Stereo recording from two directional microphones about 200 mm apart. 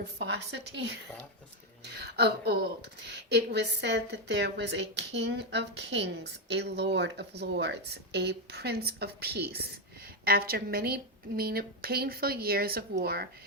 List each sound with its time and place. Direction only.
0.2 s a woman's voice: 60° right (ahead or behind)